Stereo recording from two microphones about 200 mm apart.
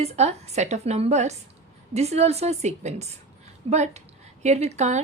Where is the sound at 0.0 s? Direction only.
35° right (ahead or behind).